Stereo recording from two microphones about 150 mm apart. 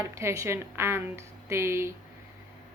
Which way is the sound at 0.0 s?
20° right (ahead or behind).